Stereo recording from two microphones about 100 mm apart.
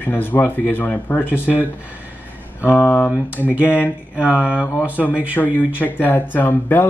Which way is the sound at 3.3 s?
15° right (ahead or behind).